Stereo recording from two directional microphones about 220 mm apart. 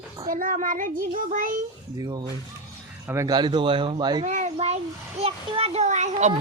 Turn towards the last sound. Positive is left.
turn(degrees=-30)  # may be behind; listen again after turning